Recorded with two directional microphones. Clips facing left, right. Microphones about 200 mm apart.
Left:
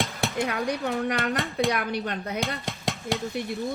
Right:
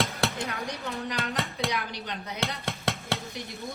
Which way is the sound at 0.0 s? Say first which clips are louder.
Right 1 dB; centre (ahead or behind).